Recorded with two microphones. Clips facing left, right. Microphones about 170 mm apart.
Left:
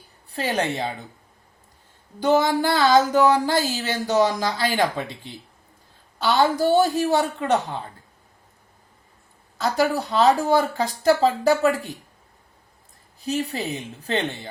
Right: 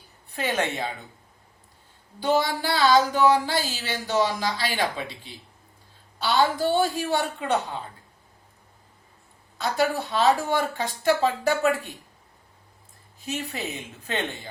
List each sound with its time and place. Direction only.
0.3 s speech: 35° left (ahead or behind)
2.2 s a sound: 45° left (ahead or behind)
9.6 s speech: 40° left (ahead or behind)
13.2 s speech: 35° left (ahead or behind)